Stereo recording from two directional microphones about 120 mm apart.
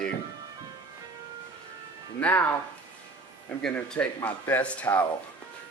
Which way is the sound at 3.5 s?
5° left (ahead or behind).